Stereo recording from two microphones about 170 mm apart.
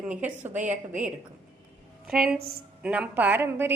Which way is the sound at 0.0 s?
5° right (ahead or behind).